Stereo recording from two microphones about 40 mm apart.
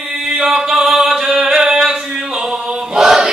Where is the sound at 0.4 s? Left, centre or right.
Centre.